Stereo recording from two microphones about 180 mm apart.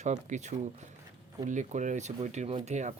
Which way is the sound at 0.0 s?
40° right (ahead or behind).